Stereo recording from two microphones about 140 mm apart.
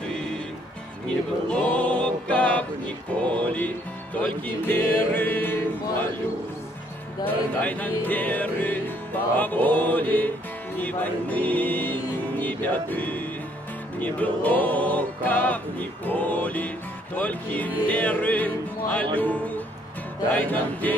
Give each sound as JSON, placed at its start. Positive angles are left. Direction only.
{"t": 1.5, "sound": "music", "side_deg": 10}
{"t": 7.2, "sound": "music", "side_deg": 10}